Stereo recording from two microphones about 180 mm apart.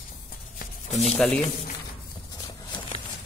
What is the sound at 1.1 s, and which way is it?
Speech, 10° left (ahead or behind).